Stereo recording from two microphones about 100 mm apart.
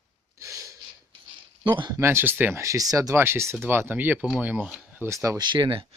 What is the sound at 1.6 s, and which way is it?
Speech, 50° right (ahead or behind).